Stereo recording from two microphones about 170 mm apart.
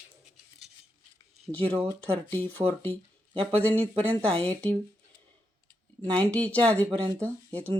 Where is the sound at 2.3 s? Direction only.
10° left (ahead or behind).